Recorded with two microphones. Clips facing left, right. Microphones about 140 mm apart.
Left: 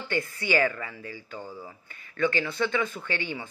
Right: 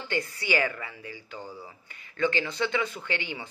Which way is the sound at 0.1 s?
15° right (ahead or behind).